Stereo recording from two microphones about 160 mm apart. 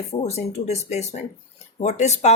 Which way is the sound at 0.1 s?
40° left (ahead or behind).